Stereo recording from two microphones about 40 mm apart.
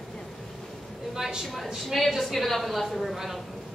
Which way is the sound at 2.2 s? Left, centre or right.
Centre.